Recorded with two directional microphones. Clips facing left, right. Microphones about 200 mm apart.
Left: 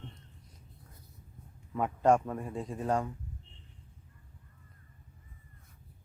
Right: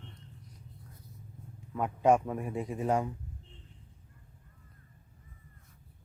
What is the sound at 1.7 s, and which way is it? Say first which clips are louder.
A man's voice: even; centre (ahead or behind).